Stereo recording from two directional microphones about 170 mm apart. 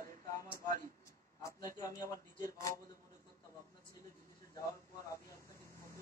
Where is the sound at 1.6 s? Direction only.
20° left (ahead or behind).